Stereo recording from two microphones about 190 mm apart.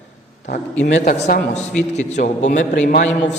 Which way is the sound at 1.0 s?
45° left (ahead or behind).